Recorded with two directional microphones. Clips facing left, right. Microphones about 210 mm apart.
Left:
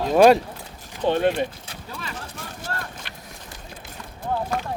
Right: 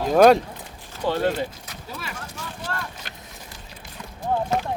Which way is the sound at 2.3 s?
45° left (ahead or behind).